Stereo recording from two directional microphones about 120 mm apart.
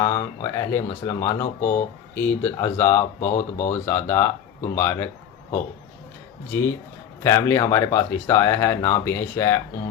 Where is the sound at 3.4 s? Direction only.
90° left.